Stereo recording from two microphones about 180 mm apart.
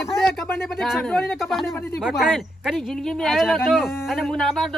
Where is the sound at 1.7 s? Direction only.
15° left (ahead or behind).